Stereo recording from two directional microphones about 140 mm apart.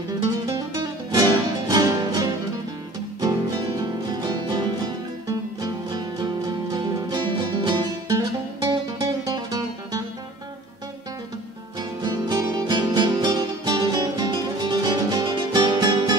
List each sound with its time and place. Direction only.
0.5 s music: 30° right (ahead or behind)
12.0 s music: 30° right (ahead or behind)